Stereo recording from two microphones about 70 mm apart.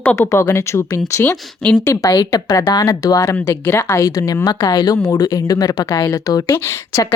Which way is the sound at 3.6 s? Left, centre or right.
Left.